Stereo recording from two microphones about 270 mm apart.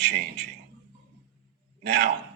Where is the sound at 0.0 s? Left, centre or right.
Right.